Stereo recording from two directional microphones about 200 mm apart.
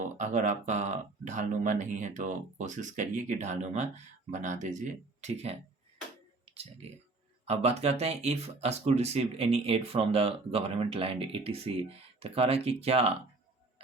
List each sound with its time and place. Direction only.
0.0 s speech: 40° right (ahead or behind)